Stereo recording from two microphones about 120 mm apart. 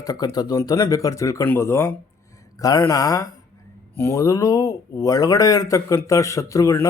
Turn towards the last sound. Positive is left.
turn(degrees=25)  # may be behind; listen again after turning